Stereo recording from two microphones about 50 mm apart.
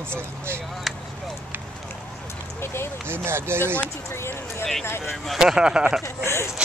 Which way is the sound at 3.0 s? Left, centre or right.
Right.